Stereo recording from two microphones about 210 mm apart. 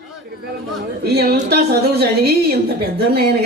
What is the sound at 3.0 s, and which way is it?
Speech, 50° right (ahead or behind).